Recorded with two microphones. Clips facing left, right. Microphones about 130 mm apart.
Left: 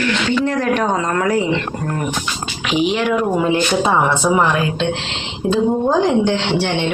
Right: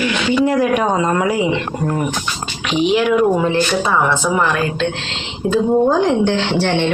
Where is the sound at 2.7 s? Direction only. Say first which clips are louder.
Right 2 dB; centre (ahead or behind).